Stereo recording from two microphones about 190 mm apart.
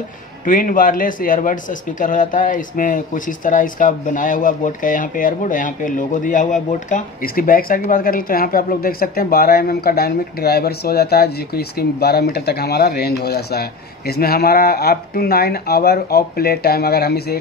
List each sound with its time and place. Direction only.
0.5 s speech: 45° left (ahead or behind)